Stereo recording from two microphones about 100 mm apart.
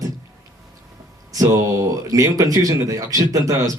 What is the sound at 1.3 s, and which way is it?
A man's voice, 35° right (ahead or behind).